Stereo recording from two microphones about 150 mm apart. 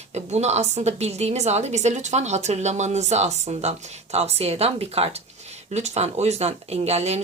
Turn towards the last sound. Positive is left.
turn(degrees=-45)  # may be behind; listen again after turning